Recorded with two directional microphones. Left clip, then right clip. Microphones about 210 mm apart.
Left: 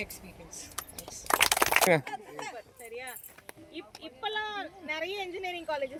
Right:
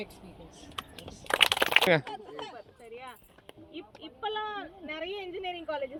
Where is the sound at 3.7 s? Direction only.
35° right (ahead or behind).